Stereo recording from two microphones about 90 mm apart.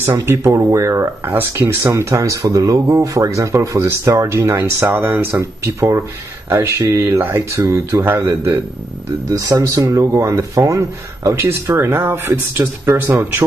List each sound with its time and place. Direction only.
0.0 s speech: 25° right (ahead or behind)
7.2 s speech: 20° right (ahead or behind)
7.5 s speech: 35° right (ahead or behind)
9.4 s speech: 40° right (ahead or behind); by 13.4 s 25° right (ahead or behind)